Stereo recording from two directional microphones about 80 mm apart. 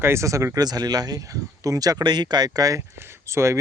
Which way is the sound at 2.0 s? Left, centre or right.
Right.